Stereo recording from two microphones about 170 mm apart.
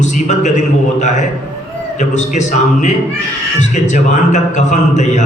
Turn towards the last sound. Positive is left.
turn(degrees=45)  # may be behind; listen again after turning